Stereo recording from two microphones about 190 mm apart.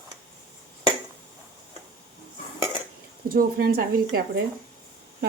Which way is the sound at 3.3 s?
50° right (ahead or behind).